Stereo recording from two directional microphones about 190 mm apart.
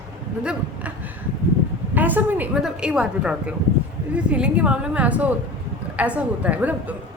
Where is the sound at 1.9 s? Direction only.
10° right (ahead or behind).